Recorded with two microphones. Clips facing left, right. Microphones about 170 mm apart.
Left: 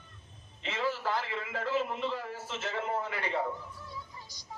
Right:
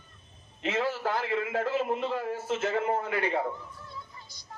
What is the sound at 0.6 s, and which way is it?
A man's voice, 50° right (ahead or behind).